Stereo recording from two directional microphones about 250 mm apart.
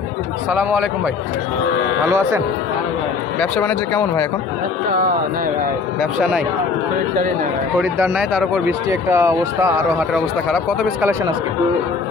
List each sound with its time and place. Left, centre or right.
0.5 s speech: centre
2.0 s speech: centre
3.3 s speech: centre
8.0 s speech: centre